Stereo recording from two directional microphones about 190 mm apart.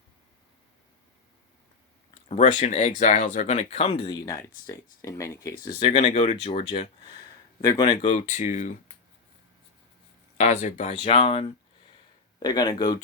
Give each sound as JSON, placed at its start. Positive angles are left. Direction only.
{"t": 2.3, "sound": "speech", "side_deg": 40}
{"t": 5.6, "sound": "speech", "side_deg": 30}
{"t": 8.1, "sound": "speech", "side_deg": 40}
{"t": 10.3, "sound": "speech", "side_deg": 40}